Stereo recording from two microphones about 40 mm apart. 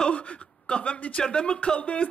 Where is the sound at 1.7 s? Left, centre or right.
Left.